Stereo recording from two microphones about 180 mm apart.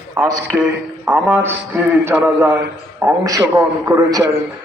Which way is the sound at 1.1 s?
10° right (ahead or behind).